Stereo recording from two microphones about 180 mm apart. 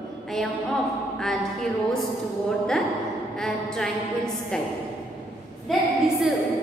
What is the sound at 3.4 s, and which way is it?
Speech, centre (ahead or behind).